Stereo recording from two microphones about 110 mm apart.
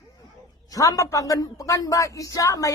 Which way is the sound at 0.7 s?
30° left (ahead or behind).